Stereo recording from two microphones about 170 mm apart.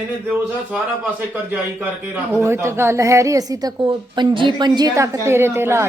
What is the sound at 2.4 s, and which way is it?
A woman's voice, 15° right (ahead or behind).